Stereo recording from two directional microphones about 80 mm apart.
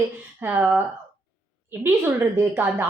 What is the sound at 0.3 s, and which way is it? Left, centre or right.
Speech, right.